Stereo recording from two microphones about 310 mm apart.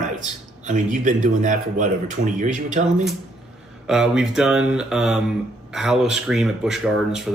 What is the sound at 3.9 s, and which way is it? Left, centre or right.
Speech, centre.